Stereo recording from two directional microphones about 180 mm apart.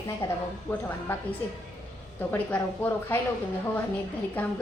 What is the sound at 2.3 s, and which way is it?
Speech, 10° left (ahead or behind).